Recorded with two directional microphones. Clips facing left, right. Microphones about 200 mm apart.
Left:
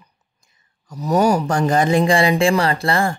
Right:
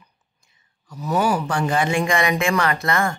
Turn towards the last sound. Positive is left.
turn(degrees=30)  # may be behind; listen again after turning